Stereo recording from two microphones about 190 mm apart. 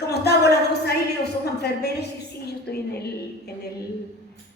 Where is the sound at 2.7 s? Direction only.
55° left (ahead or behind).